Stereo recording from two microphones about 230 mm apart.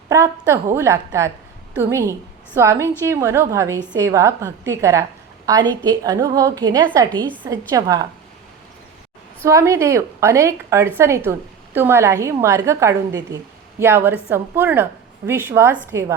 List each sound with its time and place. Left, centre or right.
0.1 s a woman's voice: centre
9.4 s a woman's voice: centre